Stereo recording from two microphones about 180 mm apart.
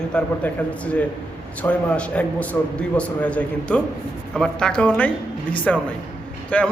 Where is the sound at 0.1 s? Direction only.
5° left (ahead or behind).